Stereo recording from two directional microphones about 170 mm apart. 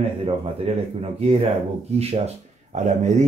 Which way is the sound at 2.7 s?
45° right (ahead or behind).